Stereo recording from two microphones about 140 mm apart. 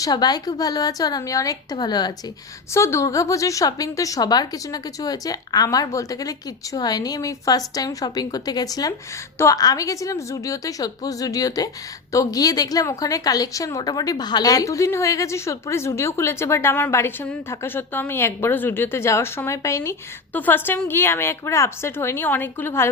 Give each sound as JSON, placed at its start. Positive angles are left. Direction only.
{"t": 0.0, "sound": "a woman's voice", "side_deg": 30}